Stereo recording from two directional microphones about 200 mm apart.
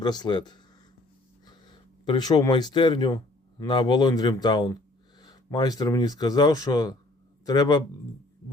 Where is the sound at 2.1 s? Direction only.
20° left (ahead or behind).